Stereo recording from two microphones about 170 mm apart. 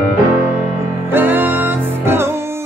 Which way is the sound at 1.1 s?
10° right (ahead or behind).